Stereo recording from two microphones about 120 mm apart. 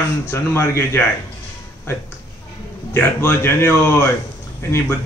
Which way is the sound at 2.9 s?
20° left (ahead or behind).